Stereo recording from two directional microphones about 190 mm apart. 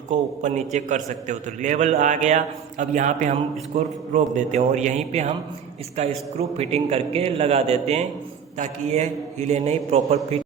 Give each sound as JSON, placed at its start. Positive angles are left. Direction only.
{"t": 0.1, "sound": "a man's voice", "side_deg": -40}